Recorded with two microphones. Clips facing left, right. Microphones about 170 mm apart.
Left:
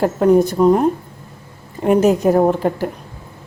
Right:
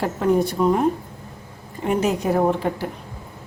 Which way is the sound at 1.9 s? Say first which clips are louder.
Left 7 dB; 45° left (ahead or behind).